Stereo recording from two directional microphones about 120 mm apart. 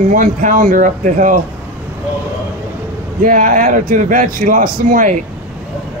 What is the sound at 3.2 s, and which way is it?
A man's voice, 90° right.